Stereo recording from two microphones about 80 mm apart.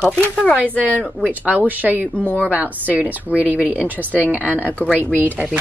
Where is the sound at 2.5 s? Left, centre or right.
Centre.